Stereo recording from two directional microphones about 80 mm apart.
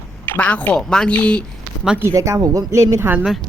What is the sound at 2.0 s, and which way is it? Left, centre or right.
Speech, right.